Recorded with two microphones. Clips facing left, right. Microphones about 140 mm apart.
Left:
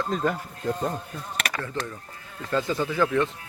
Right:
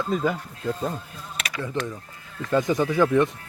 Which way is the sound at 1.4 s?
55° left (ahead or behind).